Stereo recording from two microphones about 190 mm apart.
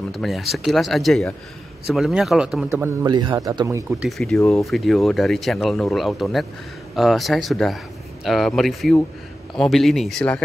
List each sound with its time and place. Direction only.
0.1 s speech: centre (ahead or behind)
2.7 s a man's voice: 15° right (ahead or behind)
4.0 s speech: centre (ahead or behind)